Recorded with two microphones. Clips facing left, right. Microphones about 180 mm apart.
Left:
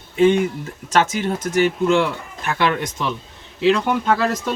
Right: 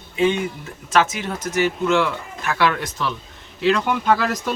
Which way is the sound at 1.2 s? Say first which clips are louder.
Left 4 dB; 50° left (ahead or behind).